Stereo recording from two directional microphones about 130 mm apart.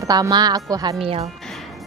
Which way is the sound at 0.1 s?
30° right (ahead or behind).